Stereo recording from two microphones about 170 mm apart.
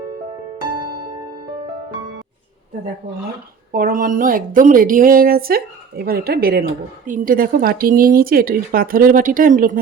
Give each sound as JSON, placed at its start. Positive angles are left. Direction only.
{"t": 3.7, "sound": "speech", "side_deg": -60}